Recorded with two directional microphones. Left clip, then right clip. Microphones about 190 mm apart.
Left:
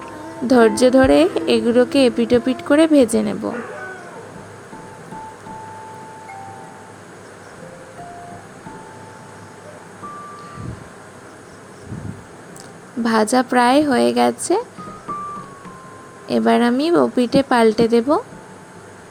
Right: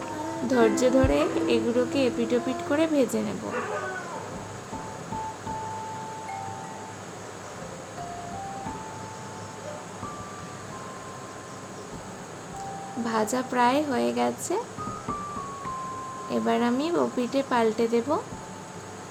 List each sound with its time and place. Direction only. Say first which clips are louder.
0.4 s a woman's voice: left 9 dB; 40° left (ahead or behind)
13.1 s speech: left 11 dB; 45° left (ahead or behind)
16.3 s a woman's voice: left 9 dB; 45° left (ahead or behind)